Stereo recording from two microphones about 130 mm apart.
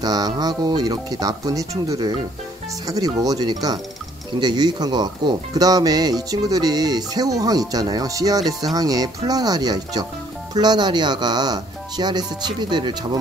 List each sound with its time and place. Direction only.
0.0 s speech: 30° right (ahead or behind)